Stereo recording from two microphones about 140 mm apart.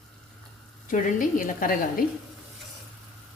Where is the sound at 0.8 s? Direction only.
75° left (ahead or behind).